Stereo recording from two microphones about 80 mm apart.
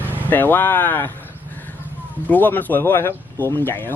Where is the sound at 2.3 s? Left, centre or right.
Left.